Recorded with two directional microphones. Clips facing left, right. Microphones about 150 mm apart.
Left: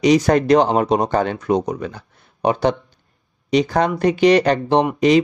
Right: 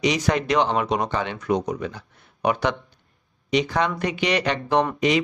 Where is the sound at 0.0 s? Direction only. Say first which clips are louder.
Left 8 dB; 40° left (ahead or behind).